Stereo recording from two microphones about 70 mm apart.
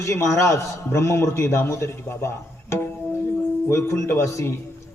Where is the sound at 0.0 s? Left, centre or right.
Left.